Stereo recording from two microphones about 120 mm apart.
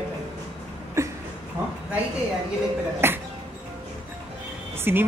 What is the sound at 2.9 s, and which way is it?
Music, 20° right (ahead or behind).